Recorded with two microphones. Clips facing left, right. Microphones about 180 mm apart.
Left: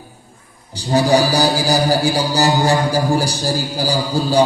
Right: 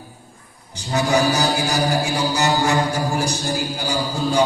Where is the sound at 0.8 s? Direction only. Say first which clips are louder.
Left 5 dB; 35° left (ahead or behind).